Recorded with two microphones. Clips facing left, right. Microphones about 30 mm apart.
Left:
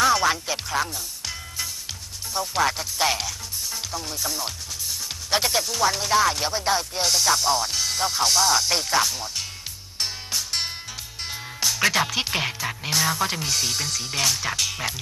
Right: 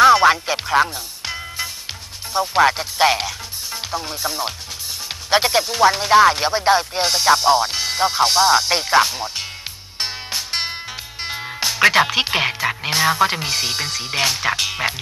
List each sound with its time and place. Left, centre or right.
0.0 s music: right
2.3 s speech: right
9.9 s music: right
11.2 s speech: right